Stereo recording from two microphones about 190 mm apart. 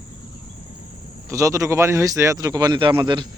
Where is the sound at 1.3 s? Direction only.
15° right (ahead or behind).